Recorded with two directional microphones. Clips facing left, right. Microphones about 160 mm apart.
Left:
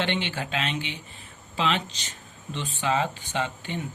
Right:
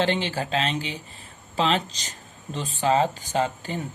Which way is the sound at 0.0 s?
35° right (ahead or behind).